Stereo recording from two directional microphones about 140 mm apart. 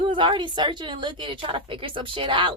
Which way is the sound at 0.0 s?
35° right (ahead or behind).